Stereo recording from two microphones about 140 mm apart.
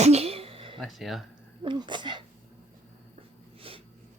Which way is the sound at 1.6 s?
35° right (ahead or behind).